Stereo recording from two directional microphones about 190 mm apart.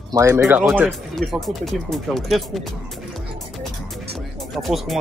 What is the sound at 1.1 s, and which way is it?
Speech, centre (ahead or behind).